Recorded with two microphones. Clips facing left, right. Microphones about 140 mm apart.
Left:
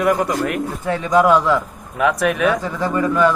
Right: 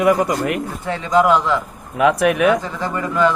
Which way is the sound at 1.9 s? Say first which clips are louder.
Right 3 dB; 15° right (ahead or behind).